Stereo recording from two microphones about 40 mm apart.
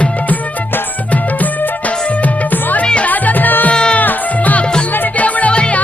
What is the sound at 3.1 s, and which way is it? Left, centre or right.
Music, left.